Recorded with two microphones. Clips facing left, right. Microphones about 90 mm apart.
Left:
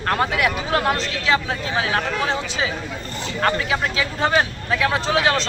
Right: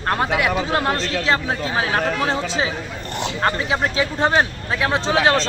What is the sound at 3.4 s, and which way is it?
Speech, 30° right (ahead or behind).